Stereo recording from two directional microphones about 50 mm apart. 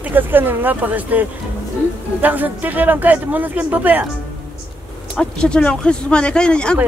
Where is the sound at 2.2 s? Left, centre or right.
Right.